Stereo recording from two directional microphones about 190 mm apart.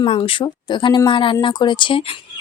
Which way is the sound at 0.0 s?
30° left (ahead or behind).